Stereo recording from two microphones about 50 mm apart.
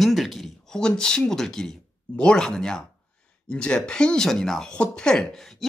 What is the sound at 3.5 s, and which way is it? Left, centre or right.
Speech, left.